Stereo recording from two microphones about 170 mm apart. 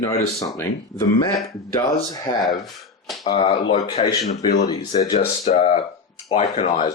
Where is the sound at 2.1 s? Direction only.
20° left (ahead or behind).